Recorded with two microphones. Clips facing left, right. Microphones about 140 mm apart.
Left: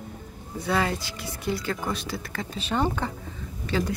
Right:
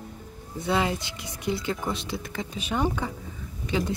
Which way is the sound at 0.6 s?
20° right (ahead or behind).